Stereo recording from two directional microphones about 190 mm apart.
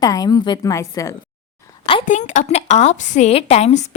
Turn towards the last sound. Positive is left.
turn(degrees=35)  # may be behind; listen again after turning